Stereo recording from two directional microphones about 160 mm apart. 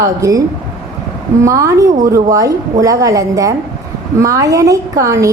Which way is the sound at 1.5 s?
20° right (ahead or behind).